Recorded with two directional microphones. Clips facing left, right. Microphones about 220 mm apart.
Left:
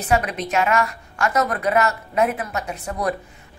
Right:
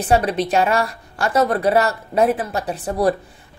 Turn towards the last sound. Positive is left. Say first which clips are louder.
# right 6 dB
turn(degrees=-35)  # may be behind; listen again after turning